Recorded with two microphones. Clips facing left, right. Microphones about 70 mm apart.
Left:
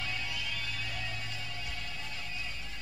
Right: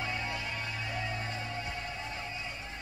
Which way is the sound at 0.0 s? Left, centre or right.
Right.